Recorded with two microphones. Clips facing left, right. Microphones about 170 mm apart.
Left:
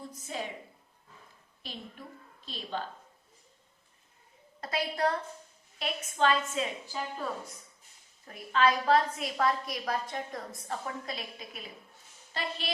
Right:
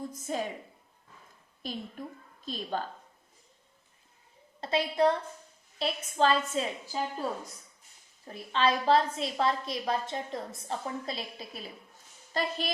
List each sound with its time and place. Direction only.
0.3 s a woman's voice: 45° right (ahead or behind)
1.6 s a woman's voice: 45° right (ahead or behind)
4.6 s a woman's voice: 25° right (ahead or behind)
8.3 s a woman's voice: 30° right (ahead or behind)